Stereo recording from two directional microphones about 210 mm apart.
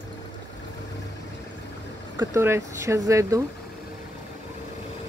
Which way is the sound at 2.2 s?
10° right (ahead or behind).